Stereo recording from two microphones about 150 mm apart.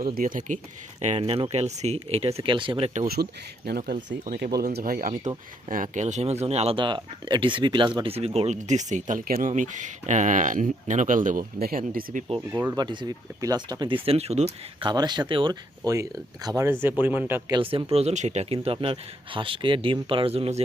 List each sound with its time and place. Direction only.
0.0 s speech: 75° right (ahead or behind)
1.0 s speech: 45° right (ahead or behind)
2.9 s speech: 75° right (ahead or behind)
3.7 s speech: 90° right
3.9 s speech: 60° right (ahead or behind)
5.6 s speech: 60° right (ahead or behind)
12.5 s speech: 15° right (ahead or behind)
12.7 s speech: 30° right (ahead or behind)
14.8 s speech: 30° right (ahead or behind)
16.8 s speech: 15° right (ahead or behind)
17.5 s speech: 35° right (ahead or behind)
17.9 s speech: 50° right (ahead or behind)